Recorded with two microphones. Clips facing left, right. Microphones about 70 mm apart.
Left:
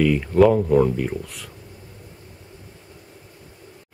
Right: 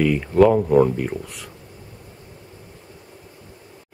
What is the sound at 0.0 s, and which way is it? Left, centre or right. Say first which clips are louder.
Speech: even; centre.